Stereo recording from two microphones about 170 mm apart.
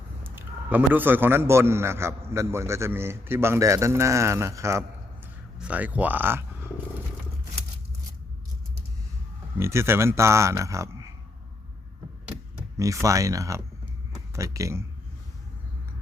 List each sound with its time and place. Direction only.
0.2 s a man's voice: 10° right (ahead or behind)
5.2 s a sound: 10° right (ahead or behind)
9.6 s a man's voice: 15° right (ahead or behind)
12.7 s speech: 20° right (ahead or behind)